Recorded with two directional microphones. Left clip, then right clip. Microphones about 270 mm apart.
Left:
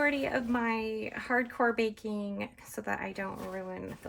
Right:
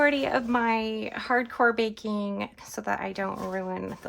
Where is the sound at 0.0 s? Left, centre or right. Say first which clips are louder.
Right 6 dB; centre.